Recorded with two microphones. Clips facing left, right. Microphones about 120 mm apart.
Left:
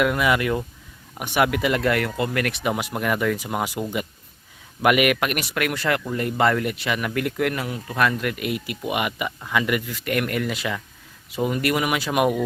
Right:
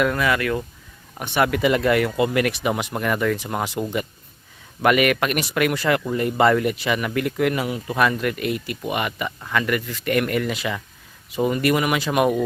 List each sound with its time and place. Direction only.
0.0 s speech: 15° left (ahead or behind)
1.2 s speech: 10° left (ahead or behind)